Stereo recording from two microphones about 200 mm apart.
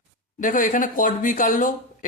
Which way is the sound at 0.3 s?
40° left (ahead or behind).